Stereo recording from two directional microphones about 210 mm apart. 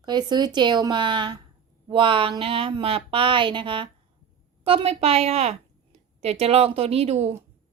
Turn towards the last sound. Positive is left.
turn(degrees=-30)  # may be behind; listen again after turning